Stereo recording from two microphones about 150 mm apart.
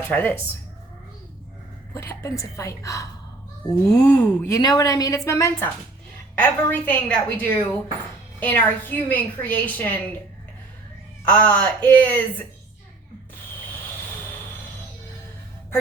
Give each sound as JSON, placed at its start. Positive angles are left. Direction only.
{"t": 0.1, "sound": "a woman's voice", "side_deg": 10}
{"t": 1.9, "sound": "a woman's voice", "side_deg": 20}
{"t": 11.3, "sound": "a woman's voice", "side_deg": 10}